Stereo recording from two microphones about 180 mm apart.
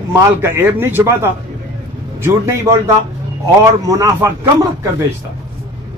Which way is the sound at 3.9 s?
15° right (ahead or behind).